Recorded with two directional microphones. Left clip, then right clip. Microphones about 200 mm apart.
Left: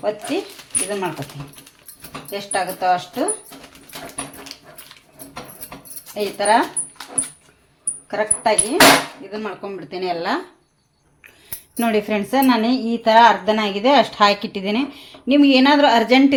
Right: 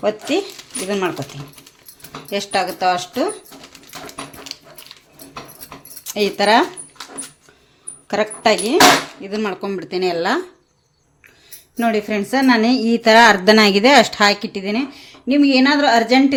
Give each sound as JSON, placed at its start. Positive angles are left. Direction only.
{"t": 0.9, "sound": "speech", "side_deg": -65}
{"t": 2.3, "sound": "speech", "side_deg": -60}
{"t": 4.5, "sound": "dog", "side_deg": -15}
{"t": 6.1, "sound": "speech", "side_deg": -55}
{"t": 8.0, "sound": "speech", "side_deg": -60}
{"t": 11.8, "sound": "a woman's voice", "side_deg": 0}
{"t": 14.2, "sound": "speech", "side_deg": -10}